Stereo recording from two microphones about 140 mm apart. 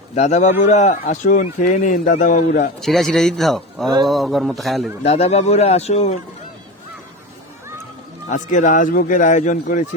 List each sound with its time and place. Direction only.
0.2 s a man's voice: 55° left (ahead or behind)
2.8 s speech: centre (ahead or behind)
5.0 s a man's voice: 50° left (ahead or behind)
8.3 s a man's voice: 60° left (ahead or behind)